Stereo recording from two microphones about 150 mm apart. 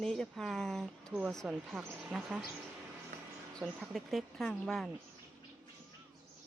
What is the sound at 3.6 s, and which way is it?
Speech, 5° right (ahead or behind).